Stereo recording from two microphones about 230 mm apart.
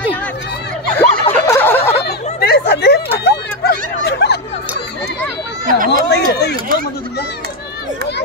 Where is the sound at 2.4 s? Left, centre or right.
Left.